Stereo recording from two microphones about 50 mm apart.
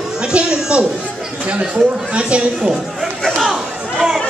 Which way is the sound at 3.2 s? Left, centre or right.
Centre.